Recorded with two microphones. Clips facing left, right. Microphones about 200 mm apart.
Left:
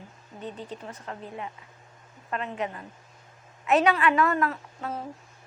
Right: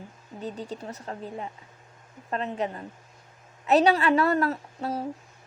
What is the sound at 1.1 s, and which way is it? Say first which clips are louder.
Speech: right 1 dB; 35° right (ahead or behind).